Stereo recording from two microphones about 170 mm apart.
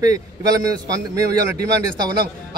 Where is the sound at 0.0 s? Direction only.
20° right (ahead or behind).